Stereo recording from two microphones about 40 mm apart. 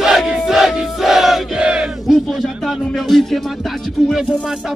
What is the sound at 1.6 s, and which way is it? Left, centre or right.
Speech, right.